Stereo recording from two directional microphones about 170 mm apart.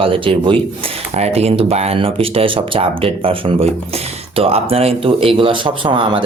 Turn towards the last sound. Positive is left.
turn(degrees=-30)  # may be behind; listen again after turning